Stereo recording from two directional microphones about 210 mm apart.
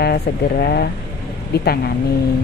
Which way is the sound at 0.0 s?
50° left (ahead or behind).